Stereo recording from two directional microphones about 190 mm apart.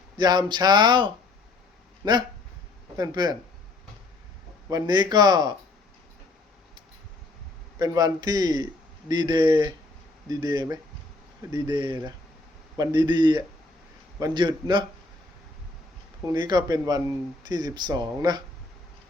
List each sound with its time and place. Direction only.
0.2 s a man's voice: 20° right (ahead or behind)
4.7 s a man's voice: 20° right (ahead or behind)
7.8 s a man's voice: 20° right (ahead or behind)
16.5 s a man's voice: 20° right (ahead or behind)